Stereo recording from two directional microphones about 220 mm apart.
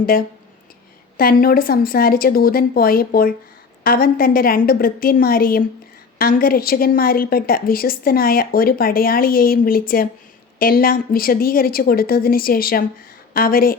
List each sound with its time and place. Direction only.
0.0 s a woman's voice: 40° left (ahead or behind)